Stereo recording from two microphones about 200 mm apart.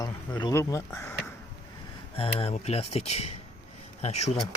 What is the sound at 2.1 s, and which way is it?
Speech, 30° left (ahead or behind).